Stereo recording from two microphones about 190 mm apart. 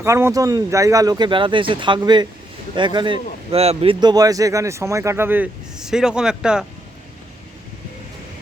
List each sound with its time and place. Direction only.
0.0 s speech: 15° right (ahead or behind)